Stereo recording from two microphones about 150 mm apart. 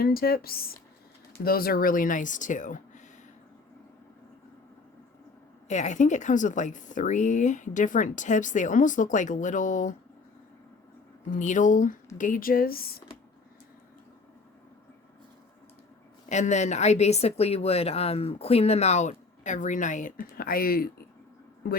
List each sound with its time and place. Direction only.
0.0 s speech: 85° left; by 3.0 s 55° left (ahead or behind)
5.6 s speech: 50° left (ahead or behind)
11.3 s speech: 55° left (ahead or behind); by 13.0 s 85° left
16.3 s a woman's voice: 55° left (ahead or behind); by 20.9 s 85° left